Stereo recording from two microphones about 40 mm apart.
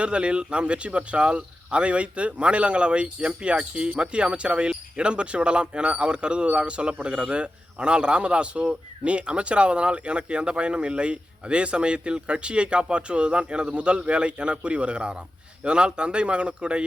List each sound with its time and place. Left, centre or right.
0.0 s speech: right